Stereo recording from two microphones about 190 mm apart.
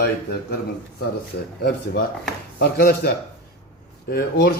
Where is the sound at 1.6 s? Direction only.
60° left (ahead or behind).